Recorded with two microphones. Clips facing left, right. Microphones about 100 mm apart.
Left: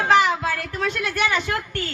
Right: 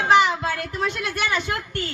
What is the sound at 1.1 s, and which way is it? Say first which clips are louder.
Speech: left 2 dB; 25° right (ahead or behind).